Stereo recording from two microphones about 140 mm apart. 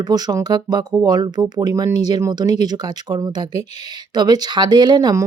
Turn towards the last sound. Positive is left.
turn(degrees=-30)  # may be behind; listen again after turning